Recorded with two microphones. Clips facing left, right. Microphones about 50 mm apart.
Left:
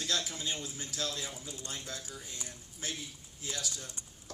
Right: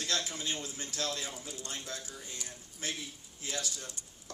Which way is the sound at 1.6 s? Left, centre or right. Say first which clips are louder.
Even; right.